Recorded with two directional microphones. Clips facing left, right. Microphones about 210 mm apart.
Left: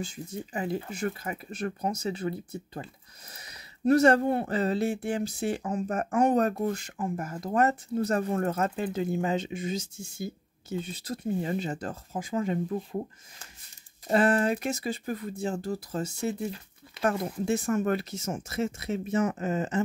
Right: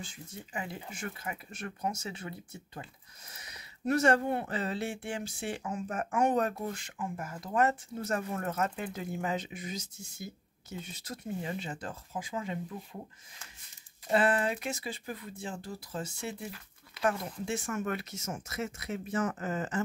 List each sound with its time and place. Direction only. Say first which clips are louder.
0.0 s speech: left 9 dB; 40° left (ahead or behind)
14.0 s speech: left 4 dB; 40° left (ahead or behind)
16.4 s a sound: left 8 dB; 25° left (ahead or behind)
17.0 s speech: left 4 dB; 40° left (ahead or behind); by 19.8 s 20° left (ahead or behind)